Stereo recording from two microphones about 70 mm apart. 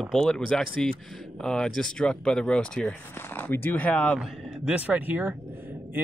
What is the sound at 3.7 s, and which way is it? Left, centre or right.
Speech, centre.